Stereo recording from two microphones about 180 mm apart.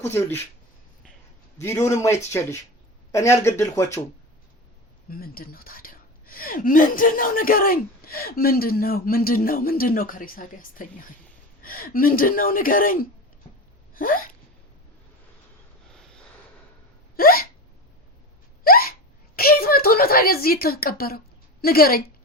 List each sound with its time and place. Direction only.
1.5 s speech: 15° left (ahead or behind)
5.1 s speech: 55° left (ahead or behind)
13.9 s gasp: 50° left (ahead or behind)
15.9 s sniff: 5° left (ahead or behind)
17.2 s hiccup: 55° left (ahead or behind)
18.6 s hiccup: 55° left (ahead or behind)
19.4 s a woman's voice: 55° left (ahead or behind)